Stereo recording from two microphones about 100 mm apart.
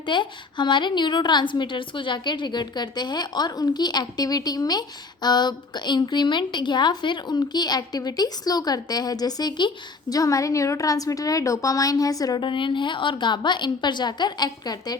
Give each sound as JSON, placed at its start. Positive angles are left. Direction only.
{"t": 0.0, "sound": "a woman's voice", "side_deg": 55}
{"t": 12.5, "sound": "a woman's voice", "side_deg": 55}